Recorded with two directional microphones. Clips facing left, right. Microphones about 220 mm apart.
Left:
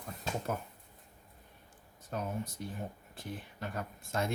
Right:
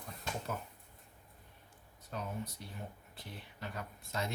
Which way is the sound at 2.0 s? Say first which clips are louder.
Left 4 dB; 50° left (ahead or behind).